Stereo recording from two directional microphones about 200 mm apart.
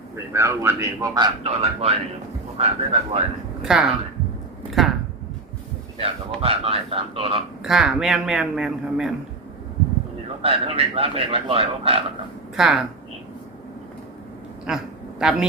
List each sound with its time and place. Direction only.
0.3 s speech: 15° right (ahead or behind); by 3.2 s 30° right (ahead or behind)
3.6 s a man's voice: 5° right (ahead or behind)
6.0 s speech: 30° right (ahead or behind)
7.6 s a man's voice: 5° right (ahead or behind)
10.4 s speech: 30° right (ahead or behind)
12.5 s a man's voice: centre (ahead or behind)
14.7 s a man's voice: 5° right (ahead or behind)